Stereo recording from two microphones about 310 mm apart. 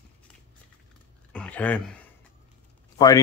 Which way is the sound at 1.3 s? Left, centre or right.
Centre.